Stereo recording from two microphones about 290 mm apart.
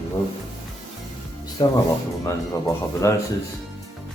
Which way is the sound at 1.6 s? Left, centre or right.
Centre.